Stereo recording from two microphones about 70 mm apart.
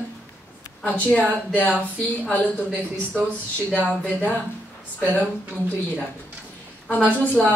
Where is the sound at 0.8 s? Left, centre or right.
Left.